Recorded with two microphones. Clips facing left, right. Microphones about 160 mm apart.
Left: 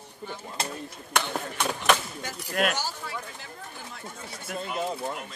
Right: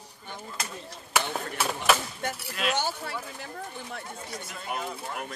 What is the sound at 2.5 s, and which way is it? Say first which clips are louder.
Speech: left 6 dB; 55° left (ahead or behind).